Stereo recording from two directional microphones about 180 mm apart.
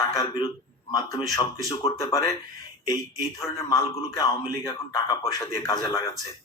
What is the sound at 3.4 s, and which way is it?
A man's voice, 15° left (ahead or behind).